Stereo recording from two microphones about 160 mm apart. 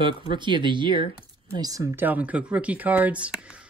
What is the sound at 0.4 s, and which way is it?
Speech, 30° right (ahead or behind).